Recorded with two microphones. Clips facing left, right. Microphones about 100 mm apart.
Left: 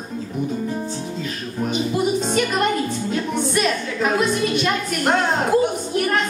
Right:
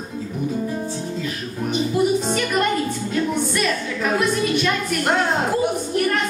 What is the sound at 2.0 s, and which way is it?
Music, 15° left (ahead or behind).